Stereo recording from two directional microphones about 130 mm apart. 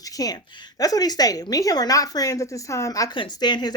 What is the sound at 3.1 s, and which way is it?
Speech, 40° left (ahead or behind).